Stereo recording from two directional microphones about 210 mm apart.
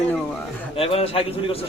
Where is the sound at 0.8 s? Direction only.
25° left (ahead or behind).